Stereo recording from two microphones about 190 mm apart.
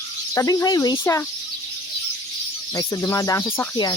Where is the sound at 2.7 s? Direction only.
15° left (ahead or behind).